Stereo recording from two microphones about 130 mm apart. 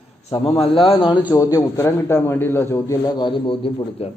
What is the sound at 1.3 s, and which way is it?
A man's voice, 25° left (ahead or behind).